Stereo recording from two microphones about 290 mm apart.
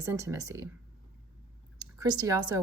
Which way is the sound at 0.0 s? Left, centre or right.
Centre.